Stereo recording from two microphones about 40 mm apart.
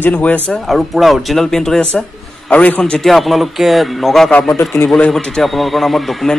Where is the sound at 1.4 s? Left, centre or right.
Centre.